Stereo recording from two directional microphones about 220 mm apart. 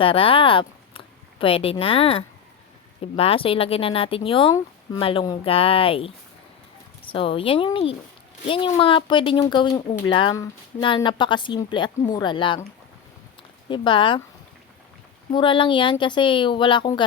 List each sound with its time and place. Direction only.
0.0 s speech: 25° left (ahead or behind)
7.1 s speech: 25° left (ahead or behind)
13.7 s speech: 20° left (ahead or behind)
15.3 s speech: 20° left (ahead or behind)